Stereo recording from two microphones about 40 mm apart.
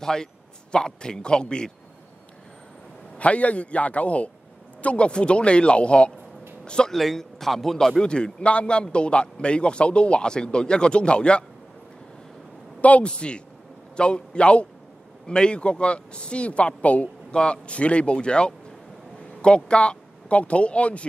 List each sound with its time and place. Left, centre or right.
0.0 s a man's voice: centre
3.2 s a man's voice: left
6.9 s a man's voice: centre
8.0 s speech: left
13.0 s speech: left
17.3 s speech: left